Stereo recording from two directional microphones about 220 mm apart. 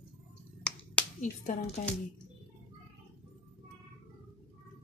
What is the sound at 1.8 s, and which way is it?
Speech, 35° left (ahead or behind).